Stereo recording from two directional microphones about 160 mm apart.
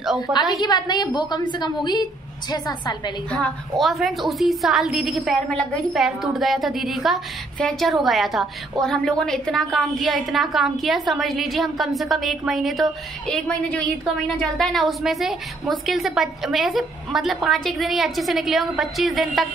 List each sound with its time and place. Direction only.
0.6 s a woman's voice: 25° left (ahead or behind)
3.3 s a woman's voice: 5° left (ahead or behind)